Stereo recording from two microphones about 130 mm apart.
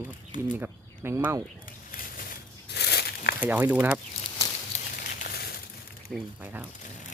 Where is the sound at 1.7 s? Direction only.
90° left.